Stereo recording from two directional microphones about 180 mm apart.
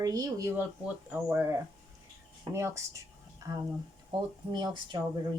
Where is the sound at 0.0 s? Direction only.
20° right (ahead or behind).